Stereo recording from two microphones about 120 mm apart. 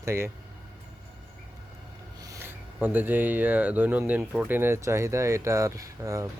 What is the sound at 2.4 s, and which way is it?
Speech, 15° right (ahead or behind).